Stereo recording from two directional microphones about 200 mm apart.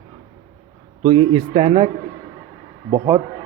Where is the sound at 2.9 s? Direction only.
20° right (ahead or behind).